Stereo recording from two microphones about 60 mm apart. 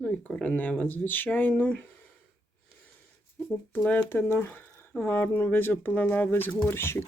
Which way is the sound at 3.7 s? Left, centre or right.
Left.